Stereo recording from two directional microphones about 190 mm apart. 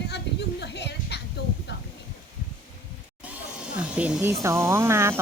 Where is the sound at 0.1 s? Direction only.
65° left (ahead or behind).